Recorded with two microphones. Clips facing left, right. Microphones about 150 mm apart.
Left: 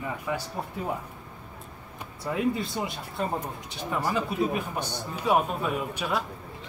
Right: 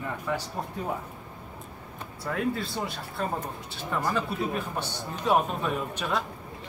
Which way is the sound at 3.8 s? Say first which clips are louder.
Left 1 dB; 10° left (ahead or behind).